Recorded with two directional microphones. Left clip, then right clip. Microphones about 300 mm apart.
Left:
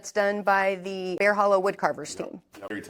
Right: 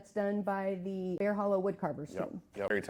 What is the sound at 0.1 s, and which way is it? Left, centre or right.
Speech, centre.